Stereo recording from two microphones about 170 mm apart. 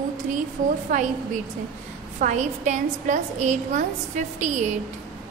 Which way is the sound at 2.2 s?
45° right (ahead or behind).